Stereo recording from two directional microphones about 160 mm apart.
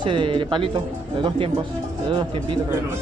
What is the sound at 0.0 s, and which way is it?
Speech, 30° right (ahead or behind).